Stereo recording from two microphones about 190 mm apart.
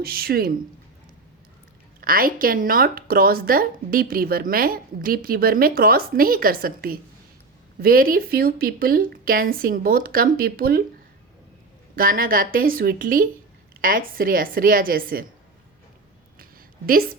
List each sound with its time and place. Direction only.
0.0 s a woman's voice: 50° right (ahead or behind)
2.0 s a woman's voice: 50° right (ahead or behind)
11.9 s a woman's voice: 50° right (ahead or behind)
16.4 s a sound: 50° right (ahead or behind)